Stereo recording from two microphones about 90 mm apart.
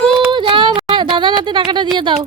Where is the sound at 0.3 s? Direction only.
65° right (ahead or behind).